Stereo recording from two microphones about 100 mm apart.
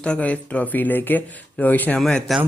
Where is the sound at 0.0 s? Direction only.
10° left (ahead or behind).